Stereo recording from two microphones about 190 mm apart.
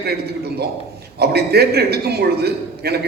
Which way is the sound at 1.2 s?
55° right (ahead or behind).